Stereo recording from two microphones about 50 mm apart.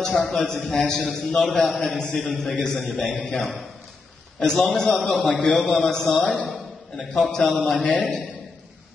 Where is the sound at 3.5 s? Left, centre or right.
Centre.